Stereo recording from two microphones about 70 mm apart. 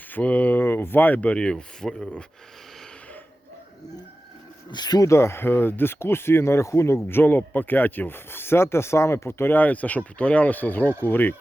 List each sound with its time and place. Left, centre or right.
0.1 s speech: left
4.7 s speech: left
5.0 s speech: left